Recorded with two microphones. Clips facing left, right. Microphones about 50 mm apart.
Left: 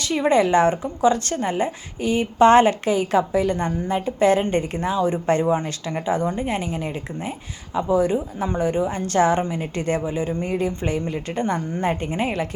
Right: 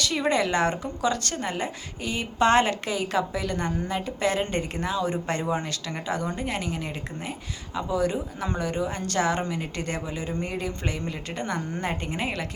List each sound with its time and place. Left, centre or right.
0.1 s speech: left